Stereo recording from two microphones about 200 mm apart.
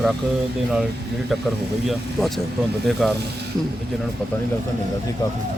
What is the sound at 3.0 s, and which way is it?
Speech, centre (ahead or behind).